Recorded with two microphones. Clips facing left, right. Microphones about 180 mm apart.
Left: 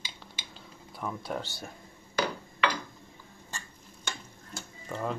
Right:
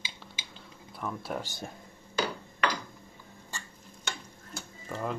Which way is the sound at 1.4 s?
20° right (ahead or behind).